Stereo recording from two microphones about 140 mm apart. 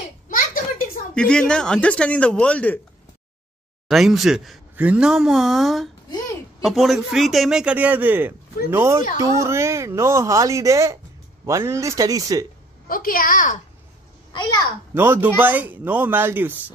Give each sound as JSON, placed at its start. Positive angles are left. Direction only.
{"t": 0.3, "sound": "a sound", "side_deg": 75}
{"t": 1.1, "sound": "speech", "side_deg": 5}
{"t": 3.9, "sound": "a man's voice", "side_deg": 0}
{"t": 12.8, "sound": "a woman's voice", "side_deg": 90}
{"t": 14.3, "sound": "a child's voice", "side_deg": 30}
{"t": 15.0, "sound": "speech", "side_deg": -15}